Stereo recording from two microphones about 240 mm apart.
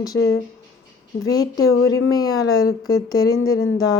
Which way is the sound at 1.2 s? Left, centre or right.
Centre.